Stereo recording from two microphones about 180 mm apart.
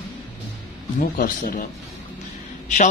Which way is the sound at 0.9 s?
50° left (ahead or behind).